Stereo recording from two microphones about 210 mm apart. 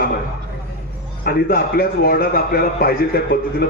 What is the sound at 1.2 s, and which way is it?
A man's voice, 45° left (ahead or behind).